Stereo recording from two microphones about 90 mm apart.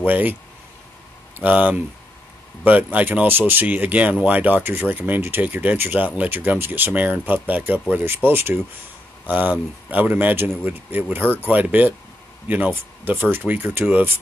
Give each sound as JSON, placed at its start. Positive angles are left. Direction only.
{"t": 0.0, "sound": "speech", "side_deg": -20}
{"t": 1.4, "sound": "speech", "side_deg": -15}